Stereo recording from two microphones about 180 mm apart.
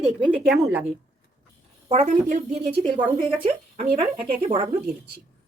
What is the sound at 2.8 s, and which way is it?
A woman's voice, 25° right (ahead or behind).